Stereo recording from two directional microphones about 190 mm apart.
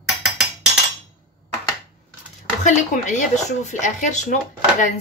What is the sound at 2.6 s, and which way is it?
Speech, 40° left (ahead or behind).